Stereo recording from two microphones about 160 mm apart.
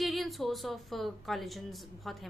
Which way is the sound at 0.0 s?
Centre (ahead or behind).